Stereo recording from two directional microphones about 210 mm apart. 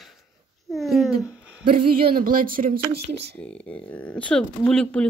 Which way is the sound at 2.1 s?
40° right (ahead or behind).